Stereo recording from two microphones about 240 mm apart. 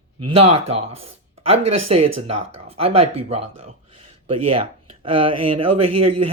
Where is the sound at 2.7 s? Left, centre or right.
Right.